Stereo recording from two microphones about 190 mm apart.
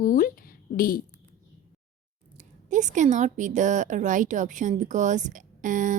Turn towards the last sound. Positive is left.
turn(degrees=-45)  # may be behind; listen again after turning